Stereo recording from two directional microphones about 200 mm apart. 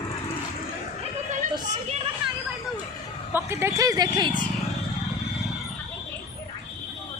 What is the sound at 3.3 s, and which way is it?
Speech, 15° right (ahead or behind).